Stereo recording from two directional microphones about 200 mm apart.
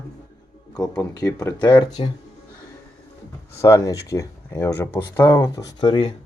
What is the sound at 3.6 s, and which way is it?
Speech, 15° left (ahead or behind).